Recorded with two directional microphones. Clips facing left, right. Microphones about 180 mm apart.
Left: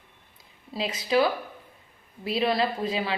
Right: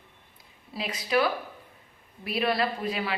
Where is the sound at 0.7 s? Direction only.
25° left (ahead or behind).